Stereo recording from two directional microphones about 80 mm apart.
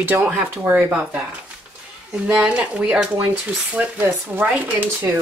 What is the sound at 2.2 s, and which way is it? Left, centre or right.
Speech, centre.